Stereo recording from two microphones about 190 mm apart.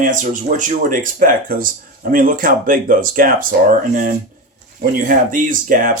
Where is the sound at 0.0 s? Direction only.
45° right (ahead or behind).